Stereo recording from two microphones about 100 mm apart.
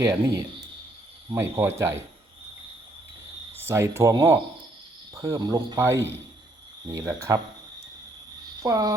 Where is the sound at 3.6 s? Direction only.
25° right (ahead or behind).